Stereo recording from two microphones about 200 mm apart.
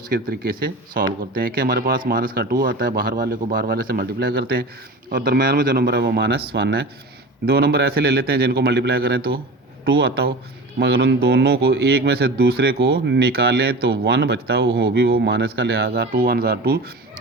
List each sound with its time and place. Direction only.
0.1 s speech: 50° right (ahead or behind)